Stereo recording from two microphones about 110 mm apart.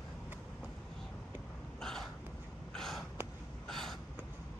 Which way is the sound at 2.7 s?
5° left (ahead or behind).